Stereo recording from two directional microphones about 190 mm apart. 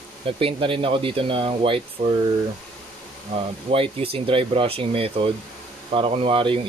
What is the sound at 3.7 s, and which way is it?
Speech, 30° right (ahead or behind).